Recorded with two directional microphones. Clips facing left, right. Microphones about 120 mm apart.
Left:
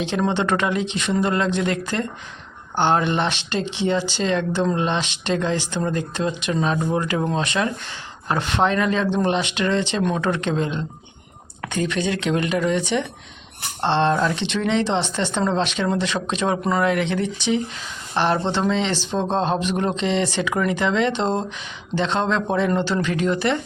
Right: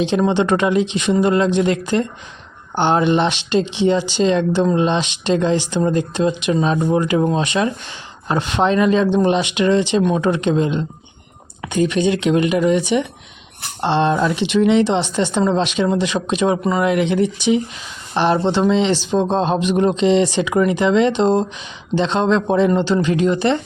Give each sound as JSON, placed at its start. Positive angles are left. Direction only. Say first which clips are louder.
{"t": 0.2, "sound": "speech", "louder": "right 2 dB", "side_deg": -15}